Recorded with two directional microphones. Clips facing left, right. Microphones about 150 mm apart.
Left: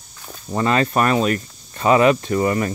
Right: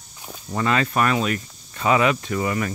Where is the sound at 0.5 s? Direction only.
35° left (ahead or behind).